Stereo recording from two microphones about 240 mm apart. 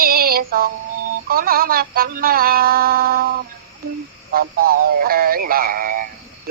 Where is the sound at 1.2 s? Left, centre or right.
Right.